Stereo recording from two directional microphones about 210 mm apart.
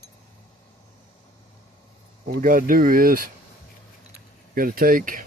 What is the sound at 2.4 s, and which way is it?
Speech, 40° right (ahead or behind).